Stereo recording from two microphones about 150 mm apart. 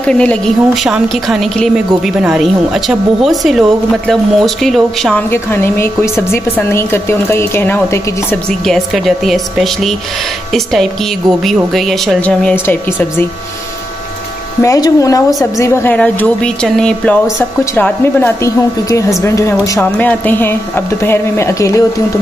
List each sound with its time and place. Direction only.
0.1 s a woman's voice: 5° left (ahead or behind)
5.3 s a woman's voice: 15° left (ahead or behind)
8.5 s a woman's voice: centre (ahead or behind)
14.6 s a woman's voice: 20° left (ahead or behind)
19.8 s a woman's voice: 10° left (ahead or behind)